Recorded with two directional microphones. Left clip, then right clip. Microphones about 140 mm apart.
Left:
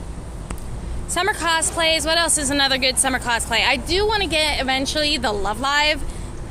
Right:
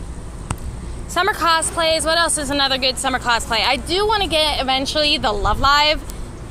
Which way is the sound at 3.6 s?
20° left (ahead or behind).